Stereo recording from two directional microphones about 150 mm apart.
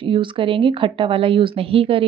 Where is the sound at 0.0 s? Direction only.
35° right (ahead or behind).